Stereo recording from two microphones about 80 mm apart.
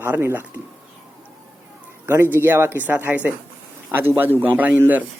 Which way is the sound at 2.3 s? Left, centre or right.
Right.